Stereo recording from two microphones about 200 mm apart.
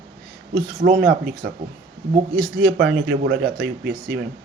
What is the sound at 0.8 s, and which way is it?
Speech, 45° right (ahead or behind).